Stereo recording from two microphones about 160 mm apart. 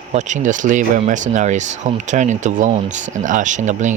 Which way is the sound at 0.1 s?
45° right (ahead or behind).